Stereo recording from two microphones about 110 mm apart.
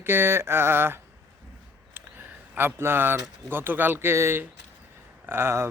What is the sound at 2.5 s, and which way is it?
Speech, 20° right (ahead or behind).